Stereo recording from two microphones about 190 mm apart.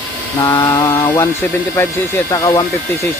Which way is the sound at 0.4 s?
15° left (ahead or behind).